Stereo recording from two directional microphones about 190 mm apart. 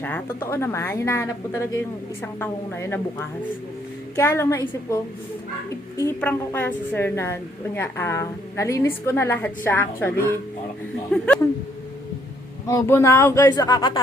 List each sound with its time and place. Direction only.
0.0 s a woman's voice: 10° left (ahead or behind)
6.0 s a woman's voice: 10° left (ahead or behind)
12.6 s a woman's voice: 15° left (ahead or behind)